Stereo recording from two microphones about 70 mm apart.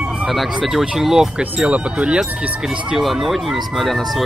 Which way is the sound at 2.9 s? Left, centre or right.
Centre.